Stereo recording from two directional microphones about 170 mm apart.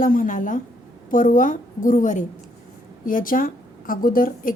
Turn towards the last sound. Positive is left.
turn(degrees=55)  # may be behind; listen again after turning